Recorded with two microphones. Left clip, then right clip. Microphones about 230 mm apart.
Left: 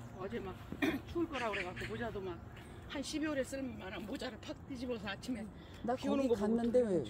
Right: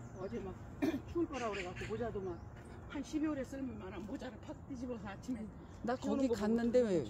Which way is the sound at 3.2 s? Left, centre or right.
Left.